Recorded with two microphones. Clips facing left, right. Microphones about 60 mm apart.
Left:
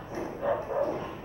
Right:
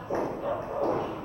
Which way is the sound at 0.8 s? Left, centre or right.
Right.